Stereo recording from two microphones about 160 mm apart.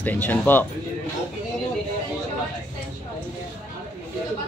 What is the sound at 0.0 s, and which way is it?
Speech, 10° left (ahead or behind).